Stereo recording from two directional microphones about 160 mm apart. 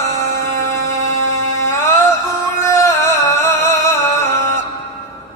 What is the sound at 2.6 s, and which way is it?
Music, 15° left (ahead or behind).